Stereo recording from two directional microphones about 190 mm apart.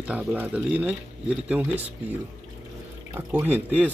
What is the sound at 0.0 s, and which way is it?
Speech, 5° right (ahead or behind).